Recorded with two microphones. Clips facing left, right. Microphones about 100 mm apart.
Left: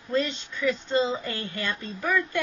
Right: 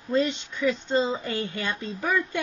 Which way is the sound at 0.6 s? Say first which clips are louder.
Right 1 dB; 20° right (ahead or behind).